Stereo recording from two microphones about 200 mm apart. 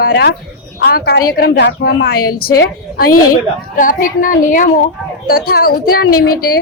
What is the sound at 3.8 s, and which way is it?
A woman's voice, 40° left (ahead or behind).